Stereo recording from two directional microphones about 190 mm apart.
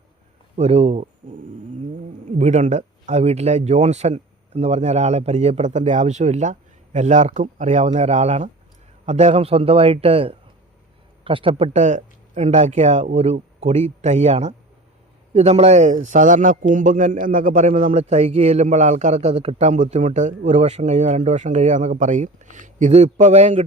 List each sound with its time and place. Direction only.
0.5 s a man's voice: 35° right (ahead or behind)
2.4 s a man's voice: 35° right (ahead or behind)